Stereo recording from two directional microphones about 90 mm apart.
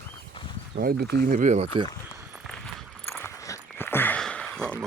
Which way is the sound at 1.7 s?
65° right (ahead or behind).